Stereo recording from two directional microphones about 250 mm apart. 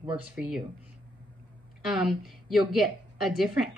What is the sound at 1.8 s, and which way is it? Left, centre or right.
A woman's voice, centre.